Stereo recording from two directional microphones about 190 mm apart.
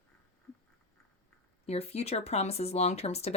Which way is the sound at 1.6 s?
35° left (ahead or behind).